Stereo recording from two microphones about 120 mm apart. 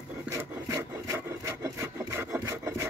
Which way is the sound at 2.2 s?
20° right (ahead or behind).